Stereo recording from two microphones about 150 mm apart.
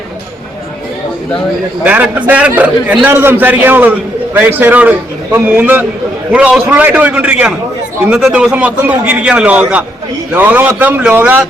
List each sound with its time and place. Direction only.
1.8 s a man's voice: 10° right (ahead or behind)